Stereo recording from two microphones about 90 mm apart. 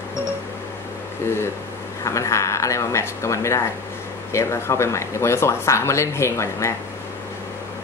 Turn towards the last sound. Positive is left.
turn(degrees=30)  # may be behind; listen again after turning